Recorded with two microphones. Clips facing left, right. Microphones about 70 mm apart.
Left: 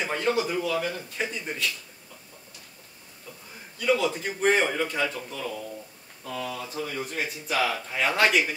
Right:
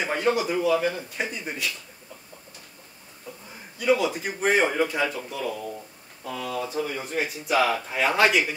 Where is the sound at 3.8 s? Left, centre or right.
Right.